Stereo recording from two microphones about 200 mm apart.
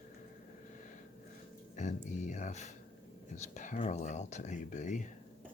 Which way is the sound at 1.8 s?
35° left (ahead or behind).